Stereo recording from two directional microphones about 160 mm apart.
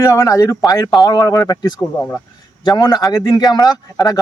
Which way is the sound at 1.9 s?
15° left (ahead or behind).